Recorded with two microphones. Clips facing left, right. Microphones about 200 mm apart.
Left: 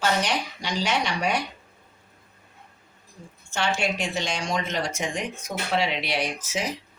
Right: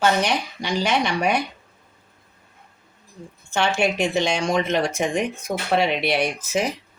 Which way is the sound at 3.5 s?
60° right (ahead or behind).